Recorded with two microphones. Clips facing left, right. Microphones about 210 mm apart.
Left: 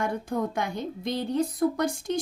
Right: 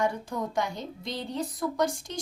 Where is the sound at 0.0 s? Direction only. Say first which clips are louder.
Left 1 dB; 55° left (ahead or behind).